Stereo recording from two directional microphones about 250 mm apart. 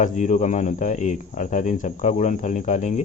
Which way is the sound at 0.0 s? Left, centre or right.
Left.